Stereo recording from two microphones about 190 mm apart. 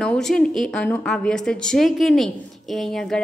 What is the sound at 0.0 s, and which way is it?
A woman's voice, 5° left (ahead or behind).